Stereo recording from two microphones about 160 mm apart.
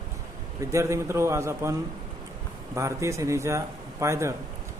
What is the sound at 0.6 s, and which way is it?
A man's voice, 20° right (ahead or behind).